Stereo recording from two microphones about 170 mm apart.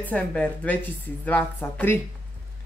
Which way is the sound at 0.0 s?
10° left (ahead or behind).